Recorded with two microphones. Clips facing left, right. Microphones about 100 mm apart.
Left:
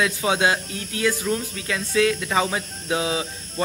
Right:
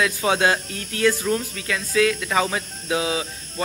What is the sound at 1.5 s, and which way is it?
Speech, 25° left (ahead or behind).